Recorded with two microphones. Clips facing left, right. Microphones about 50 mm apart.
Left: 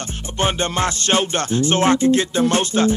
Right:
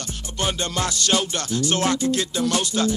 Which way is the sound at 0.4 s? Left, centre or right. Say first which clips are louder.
Left 5 dB; left.